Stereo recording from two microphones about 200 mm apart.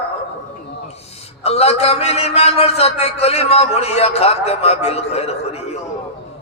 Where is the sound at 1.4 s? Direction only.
30° left (ahead or behind).